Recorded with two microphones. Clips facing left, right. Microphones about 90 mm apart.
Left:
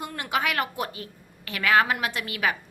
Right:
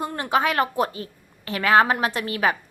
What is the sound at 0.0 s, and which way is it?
A woman's voice, 30° right (ahead or behind).